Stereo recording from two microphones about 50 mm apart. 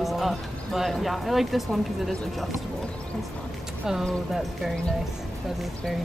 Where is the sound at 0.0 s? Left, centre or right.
Centre.